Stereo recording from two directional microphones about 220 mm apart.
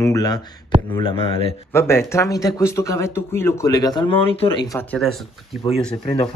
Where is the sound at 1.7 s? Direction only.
10° left (ahead or behind).